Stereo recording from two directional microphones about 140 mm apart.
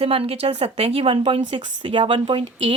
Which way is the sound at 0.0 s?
45° right (ahead or behind).